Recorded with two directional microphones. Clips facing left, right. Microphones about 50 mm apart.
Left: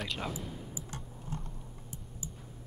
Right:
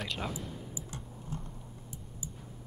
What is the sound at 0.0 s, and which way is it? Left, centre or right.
Speech, centre.